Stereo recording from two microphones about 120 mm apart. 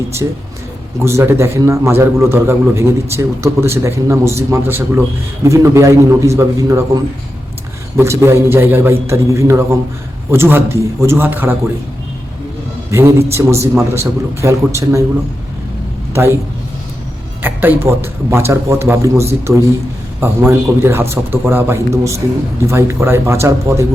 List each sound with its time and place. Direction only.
0.2 s a man's voice: 25° right (ahead or behind)
12.9 s a man's voice: 25° right (ahead or behind)
17.4 s a man's voice: 15° right (ahead or behind)